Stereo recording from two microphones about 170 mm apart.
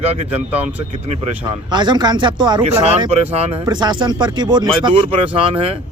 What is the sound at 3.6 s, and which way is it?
Speech, 25° right (ahead or behind).